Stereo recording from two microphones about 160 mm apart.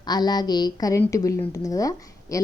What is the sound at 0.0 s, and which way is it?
A woman's voice, 25° left (ahead or behind).